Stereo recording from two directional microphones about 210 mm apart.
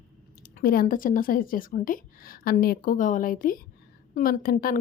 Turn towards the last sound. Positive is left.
turn(degrees=40)  # may be behind; listen again after turning